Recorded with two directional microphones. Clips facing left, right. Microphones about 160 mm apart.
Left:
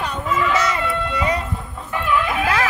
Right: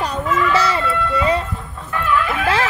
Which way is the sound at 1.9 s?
15° left (ahead or behind).